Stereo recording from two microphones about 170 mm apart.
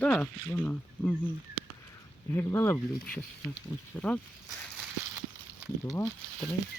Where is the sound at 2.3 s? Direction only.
15° left (ahead or behind).